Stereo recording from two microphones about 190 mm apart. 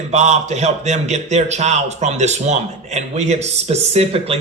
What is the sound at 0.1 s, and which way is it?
A man's voice, 35° right (ahead or behind).